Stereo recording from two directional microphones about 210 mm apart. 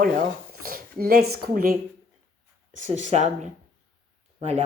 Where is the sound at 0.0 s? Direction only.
45° right (ahead or behind).